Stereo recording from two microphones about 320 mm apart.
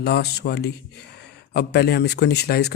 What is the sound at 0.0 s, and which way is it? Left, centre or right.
Speech, left.